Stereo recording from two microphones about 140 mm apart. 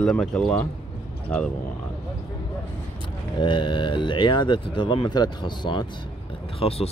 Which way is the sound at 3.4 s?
35° left (ahead or behind).